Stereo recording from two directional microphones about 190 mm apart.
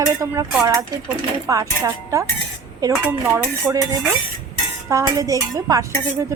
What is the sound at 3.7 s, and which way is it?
Dishes, 20° right (ahead or behind).